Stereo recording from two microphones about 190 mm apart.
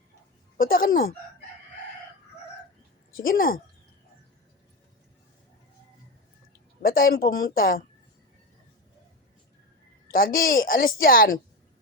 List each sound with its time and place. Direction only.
0.5 s a woman's voice: 50° left (ahead or behind)
3.2 s a woman's voice: 50° left (ahead or behind)
6.8 s a woman's voice: 50° left (ahead or behind)
10.1 s a woman's voice: 50° left (ahead or behind)